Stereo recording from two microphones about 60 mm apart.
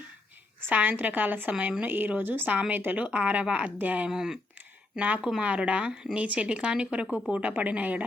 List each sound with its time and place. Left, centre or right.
0.7 s a woman's voice: right
4.1 s speech: centre
4.9 s speech: right